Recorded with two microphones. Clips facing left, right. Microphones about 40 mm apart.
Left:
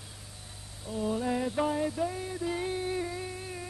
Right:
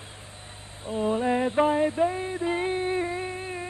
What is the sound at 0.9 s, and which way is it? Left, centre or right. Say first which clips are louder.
Music: right 6 dB; right.